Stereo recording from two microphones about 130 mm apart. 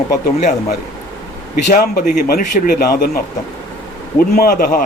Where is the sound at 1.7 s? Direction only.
85° left.